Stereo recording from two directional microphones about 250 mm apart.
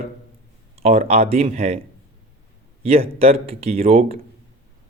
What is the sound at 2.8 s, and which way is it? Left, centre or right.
A man's voice, right.